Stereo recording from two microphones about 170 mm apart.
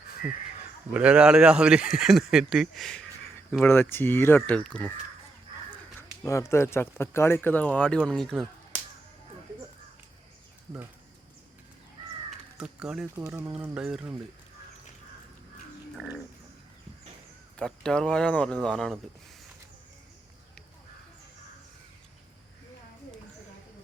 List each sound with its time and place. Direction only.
0.9 s speech: 5° right (ahead or behind)
3.6 s speech: 15° left (ahead or behind)
6.0 s speech: 15° left (ahead or behind)
12.3 s crow: 5° right (ahead or behind)
13.2 s speech: 15° right (ahead or behind)
16.0 s speech: 5° left (ahead or behind)
17.6 s speech: 5° left (ahead or behind)